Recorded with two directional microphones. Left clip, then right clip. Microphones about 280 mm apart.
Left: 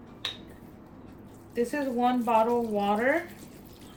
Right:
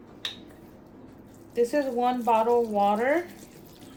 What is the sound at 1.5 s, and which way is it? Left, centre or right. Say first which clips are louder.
Speech: right 4 dB; centre.